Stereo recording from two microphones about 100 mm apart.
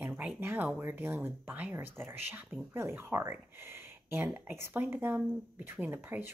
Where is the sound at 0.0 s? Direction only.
15° right (ahead or behind).